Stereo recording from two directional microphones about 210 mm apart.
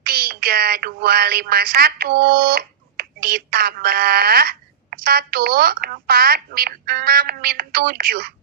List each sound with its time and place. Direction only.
0.0 s speech: 45° right (ahead or behind)